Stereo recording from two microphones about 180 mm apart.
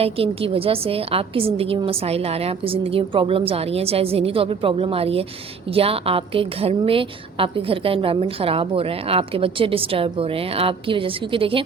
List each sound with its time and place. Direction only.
0.0 s a woman's voice: 30° right (ahead or behind)